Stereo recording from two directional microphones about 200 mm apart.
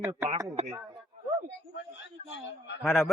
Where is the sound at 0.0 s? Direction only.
15° right (ahead or behind).